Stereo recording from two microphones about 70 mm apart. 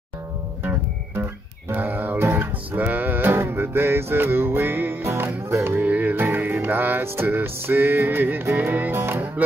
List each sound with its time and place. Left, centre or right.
0.7 s guitar: right
2.2 s music: right